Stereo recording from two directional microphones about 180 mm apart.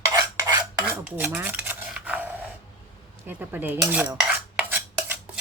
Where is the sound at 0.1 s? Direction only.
20° right (ahead or behind).